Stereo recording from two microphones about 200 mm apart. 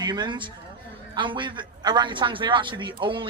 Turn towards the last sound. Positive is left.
turn(degrees=-25)  # may be behind; listen again after turning